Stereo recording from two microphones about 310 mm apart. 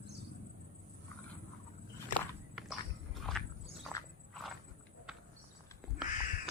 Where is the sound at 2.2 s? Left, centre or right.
Centre.